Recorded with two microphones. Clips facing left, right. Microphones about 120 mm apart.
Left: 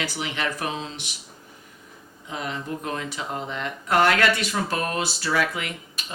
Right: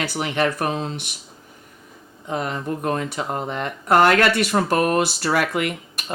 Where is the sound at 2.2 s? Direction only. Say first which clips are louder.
Right 6 dB; 45° right (ahead or behind).